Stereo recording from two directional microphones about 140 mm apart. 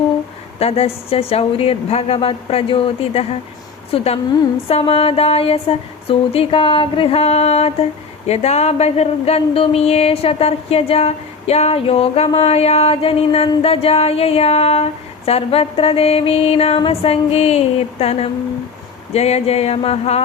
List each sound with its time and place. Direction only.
0.6 s speech: 45° left (ahead or behind)